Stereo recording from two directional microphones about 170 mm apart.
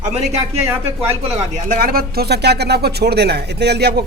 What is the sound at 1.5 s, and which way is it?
Speech, 50° right (ahead or behind).